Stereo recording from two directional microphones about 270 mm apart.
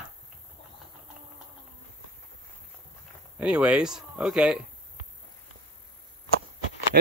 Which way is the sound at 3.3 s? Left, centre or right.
Centre.